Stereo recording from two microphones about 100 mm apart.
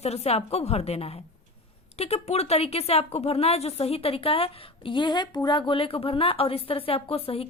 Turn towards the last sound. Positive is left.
turn(degrees=75)  # may be behind; listen again after turning